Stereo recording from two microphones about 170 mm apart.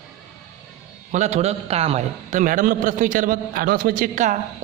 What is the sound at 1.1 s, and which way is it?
A man's voice, 40° right (ahead or behind).